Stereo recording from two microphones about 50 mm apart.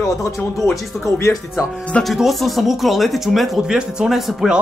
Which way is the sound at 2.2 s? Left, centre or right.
Centre.